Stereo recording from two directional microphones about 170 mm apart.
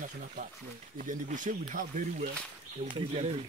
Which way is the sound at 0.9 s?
50° right (ahead or behind).